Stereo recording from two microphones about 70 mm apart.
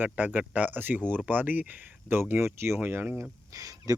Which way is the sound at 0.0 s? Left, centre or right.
Right.